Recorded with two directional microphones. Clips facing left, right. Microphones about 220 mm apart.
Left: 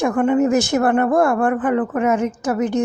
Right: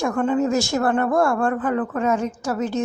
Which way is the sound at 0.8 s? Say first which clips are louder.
Left 4 dB; 60° left (ahead or behind).